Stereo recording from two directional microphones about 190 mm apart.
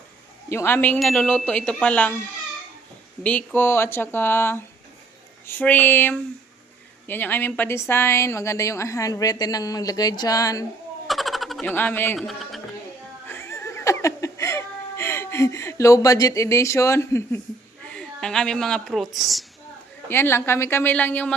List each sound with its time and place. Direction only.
0.5 s a woman's voice: 10° left (ahead or behind)
3.2 s a woman's voice: 10° left (ahead or behind)
11.1 s a sound: centre (ahead or behind)
11.7 s speech: 10° left (ahead or behind)
13.2 s laughter: 15° left (ahead or behind)
17.9 s speech: 5° left (ahead or behind)
20.1 s a woman's voice: 10° left (ahead or behind)